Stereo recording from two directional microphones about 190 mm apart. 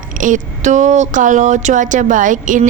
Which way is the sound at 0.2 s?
40° right (ahead or behind).